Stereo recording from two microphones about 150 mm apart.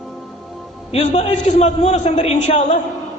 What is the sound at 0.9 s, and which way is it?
A man's voice, 50° left (ahead or behind).